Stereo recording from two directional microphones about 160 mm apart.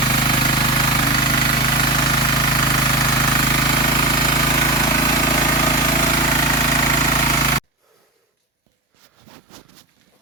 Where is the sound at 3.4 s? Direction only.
30° left (ahead or behind).